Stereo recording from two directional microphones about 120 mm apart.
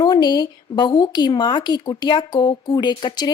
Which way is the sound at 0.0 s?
35° left (ahead or behind).